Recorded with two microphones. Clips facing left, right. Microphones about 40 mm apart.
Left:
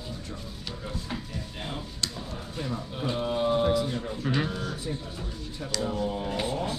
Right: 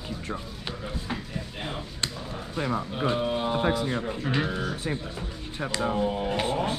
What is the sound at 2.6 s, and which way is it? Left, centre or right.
Speech, right.